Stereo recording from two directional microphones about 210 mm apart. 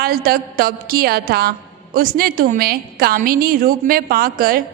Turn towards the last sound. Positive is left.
turn(degrees=-45)  # may be behind; listen again after turning